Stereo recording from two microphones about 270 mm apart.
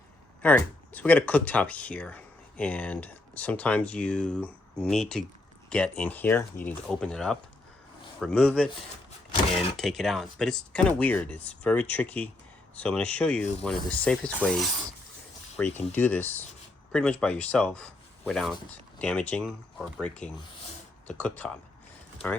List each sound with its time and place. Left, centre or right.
0.4 s speech: centre
9.3 s speech: left
9.7 s speech: centre